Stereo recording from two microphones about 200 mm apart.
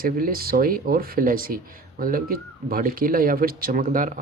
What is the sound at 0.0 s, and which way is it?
Speech, 45° right (ahead or behind).